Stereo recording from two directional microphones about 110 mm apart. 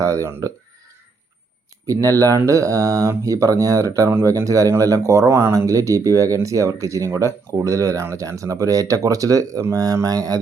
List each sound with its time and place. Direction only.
0.0 s speech: 30° right (ahead or behind)
1.9 s speech: 30° right (ahead or behind)